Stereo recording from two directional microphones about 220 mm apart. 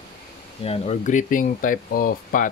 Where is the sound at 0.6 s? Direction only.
25° left (ahead or behind).